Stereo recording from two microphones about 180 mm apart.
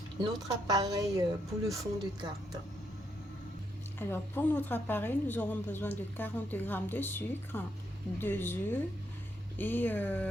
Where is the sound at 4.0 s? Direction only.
10° left (ahead or behind).